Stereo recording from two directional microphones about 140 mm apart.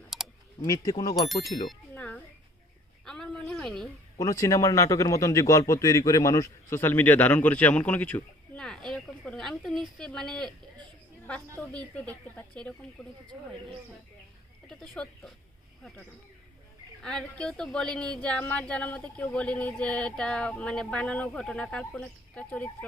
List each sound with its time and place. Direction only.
0.1 s typing: centre (ahead or behind)
0.6 s speech: 25° left (ahead or behind)
1.6 s a sound: 10° left (ahead or behind)
4.2 s speech: 25° left (ahead or behind); by 10.5 s 5° left (ahead or behind)
11.7 s speech: 10° left (ahead or behind)
14.7 s speech: 5° left (ahead or behind)
17.0 s speech: 5° left (ahead or behind)